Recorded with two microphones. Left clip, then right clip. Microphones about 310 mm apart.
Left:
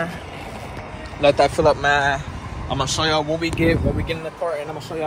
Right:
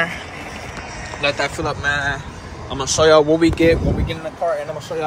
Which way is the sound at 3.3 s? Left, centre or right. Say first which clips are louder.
Right 7 dB; right.